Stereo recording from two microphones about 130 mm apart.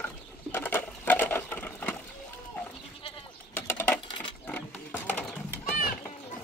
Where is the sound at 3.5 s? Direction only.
15° left (ahead or behind).